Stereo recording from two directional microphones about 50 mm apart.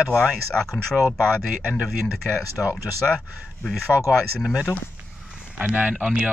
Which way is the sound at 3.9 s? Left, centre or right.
Left.